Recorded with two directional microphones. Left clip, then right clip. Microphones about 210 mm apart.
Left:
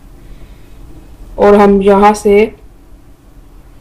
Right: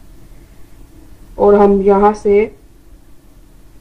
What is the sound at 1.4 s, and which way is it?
A man's voice, 10° left (ahead or behind).